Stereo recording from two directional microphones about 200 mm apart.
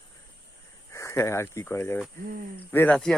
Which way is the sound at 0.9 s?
15° left (ahead or behind).